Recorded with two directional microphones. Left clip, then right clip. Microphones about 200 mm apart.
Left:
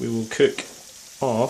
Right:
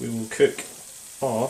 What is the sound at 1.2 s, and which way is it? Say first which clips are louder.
Speech: left 2 dB; 40° left (ahead or behind).